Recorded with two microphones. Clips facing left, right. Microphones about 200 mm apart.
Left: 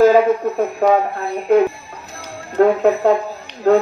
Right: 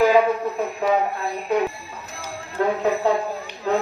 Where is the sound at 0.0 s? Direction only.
45° left (ahead or behind).